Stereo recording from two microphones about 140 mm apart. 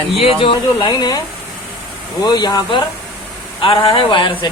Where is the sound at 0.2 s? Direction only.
40° left (ahead or behind).